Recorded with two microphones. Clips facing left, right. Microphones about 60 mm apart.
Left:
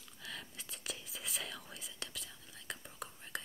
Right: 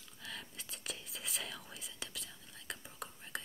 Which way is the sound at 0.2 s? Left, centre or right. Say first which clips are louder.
Even; centre.